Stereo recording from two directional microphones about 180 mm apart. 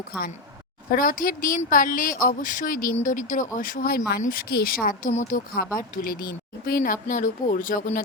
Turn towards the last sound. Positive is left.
turn(degrees=45)  # may be behind; listen again after turning